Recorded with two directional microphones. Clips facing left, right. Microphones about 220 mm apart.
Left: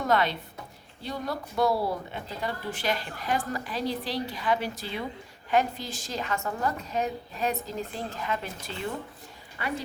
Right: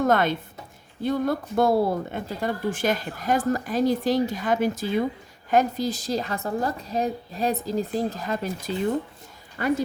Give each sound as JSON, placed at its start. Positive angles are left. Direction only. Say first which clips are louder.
{"t": 0.0, "sound": "a woman's voice", "louder": "right 5 dB", "side_deg": -50}